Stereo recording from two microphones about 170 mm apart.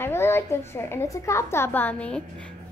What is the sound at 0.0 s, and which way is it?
A woman's voice, 15° left (ahead or behind).